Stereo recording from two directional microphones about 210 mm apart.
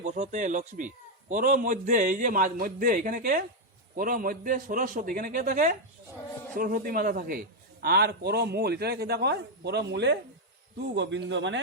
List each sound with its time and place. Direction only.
0.0 s a man's voice: 35° right (ahead or behind); by 11.6 s 60° right (ahead or behind)